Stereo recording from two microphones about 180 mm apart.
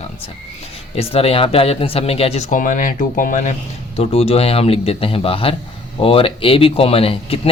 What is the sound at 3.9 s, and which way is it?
Speech, 35° left (ahead or behind).